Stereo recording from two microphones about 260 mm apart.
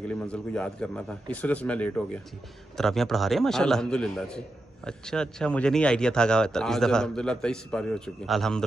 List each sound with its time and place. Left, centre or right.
0.1 s speech: centre